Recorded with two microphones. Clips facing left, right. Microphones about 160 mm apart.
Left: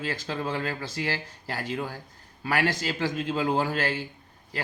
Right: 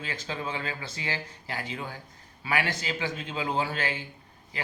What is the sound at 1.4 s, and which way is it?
Speech, 55° left (ahead or behind).